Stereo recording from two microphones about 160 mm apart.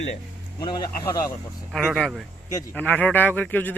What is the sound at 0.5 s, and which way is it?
Speech, 25° left (ahead or behind).